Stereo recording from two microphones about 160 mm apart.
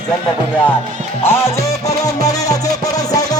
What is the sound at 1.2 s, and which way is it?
Music, 15° left (ahead or behind).